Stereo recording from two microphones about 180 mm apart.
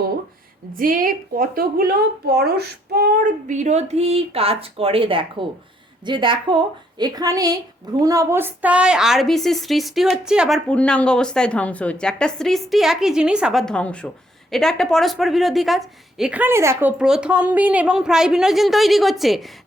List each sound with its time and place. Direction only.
0.8 s a woman's voice: 50° right (ahead or behind); by 16.9 s 15° right (ahead or behind)
17.0 s a woman's voice: 5° right (ahead or behind)